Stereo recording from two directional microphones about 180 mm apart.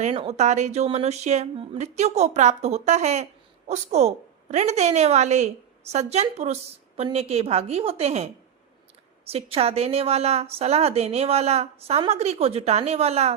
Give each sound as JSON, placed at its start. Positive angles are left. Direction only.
{"t": 0.0, "sound": "a woman's voice", "side_deg": -35}
{"t": 9.3, "sound": "a woman's voice", "side_deg": -35}